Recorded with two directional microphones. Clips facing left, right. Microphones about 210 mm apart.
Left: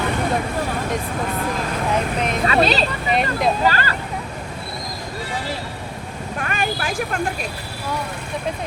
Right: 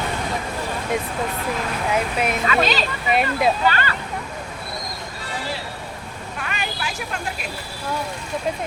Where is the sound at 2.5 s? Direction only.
35° left (ahead or behind).